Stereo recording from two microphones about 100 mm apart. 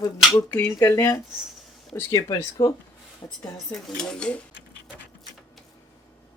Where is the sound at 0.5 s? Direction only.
25° left (ahead or behind); by 3.4 s 45° left (ahead or behind).